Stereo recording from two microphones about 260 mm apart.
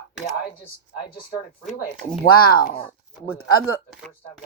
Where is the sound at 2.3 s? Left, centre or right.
Left.